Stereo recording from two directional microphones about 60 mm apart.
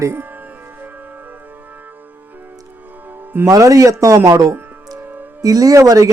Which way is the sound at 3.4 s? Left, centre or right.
Right.